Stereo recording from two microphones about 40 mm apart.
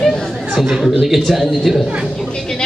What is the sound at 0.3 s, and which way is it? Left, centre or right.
Chatter, centre.